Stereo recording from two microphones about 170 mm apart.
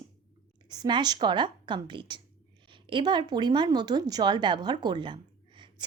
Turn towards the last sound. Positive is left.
turn(degrees=-25)  # may be behind; listen again after turning